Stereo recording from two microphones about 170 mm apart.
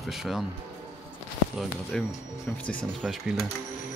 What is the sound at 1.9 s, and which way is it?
Speech, centre (ahead or behind).